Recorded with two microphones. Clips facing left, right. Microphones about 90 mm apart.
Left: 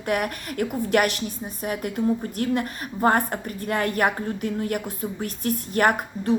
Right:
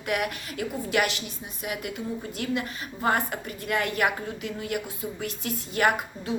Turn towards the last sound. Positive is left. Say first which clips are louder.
# left 3 dB
turn(degrees=45)  # may be behind; listen again after turning